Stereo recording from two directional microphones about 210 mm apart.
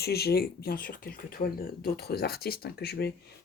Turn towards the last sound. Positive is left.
turn(degrees=50)  # may be behind; listen again after turning